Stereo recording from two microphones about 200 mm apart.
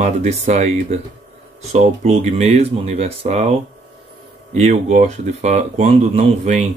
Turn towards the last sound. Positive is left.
turn(degrees=-35)  # may be behind; listen again after turning